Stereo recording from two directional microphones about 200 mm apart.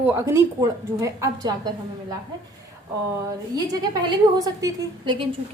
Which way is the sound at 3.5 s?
20° right (ahead or behind).